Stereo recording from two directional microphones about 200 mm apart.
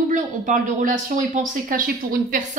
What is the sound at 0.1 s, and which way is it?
A woman's voice, 40° right (ahead or behind).